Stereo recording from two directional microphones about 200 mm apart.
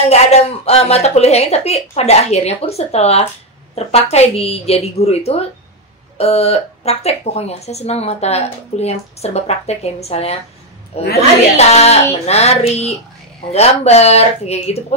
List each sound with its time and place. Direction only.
0.0 s speech: 30° left (ahead or behind)